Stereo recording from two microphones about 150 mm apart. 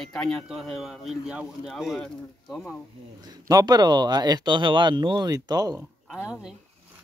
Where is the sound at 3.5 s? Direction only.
25° right (ahead or behind).